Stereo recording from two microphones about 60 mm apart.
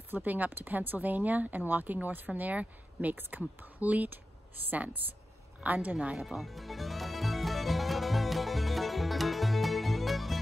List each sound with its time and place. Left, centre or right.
0.1 s speech: right
6.1 s music: centre